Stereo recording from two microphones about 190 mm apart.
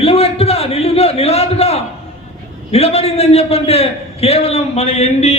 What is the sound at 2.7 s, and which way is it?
A man's voice, 30° left (ahead or behind).